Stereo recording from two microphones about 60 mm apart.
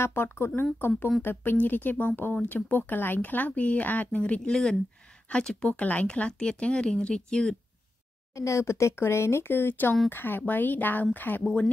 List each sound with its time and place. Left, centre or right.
0.0 s speech: left
4.2 s speech: centre
8.4 s speech: left